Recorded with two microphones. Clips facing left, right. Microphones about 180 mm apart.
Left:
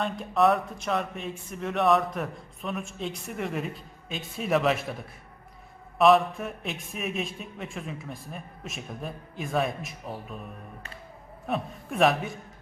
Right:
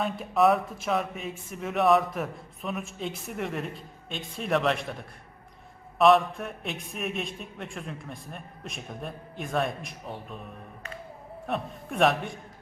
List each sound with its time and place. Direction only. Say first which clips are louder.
0.0 s a man's voice: even; centre (ahead or behind)
11.4 s a man's voice: left 1 dB; centre (ahead or behind)